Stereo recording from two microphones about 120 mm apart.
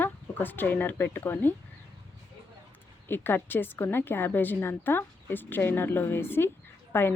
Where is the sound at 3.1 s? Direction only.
15° left (ahead or behind).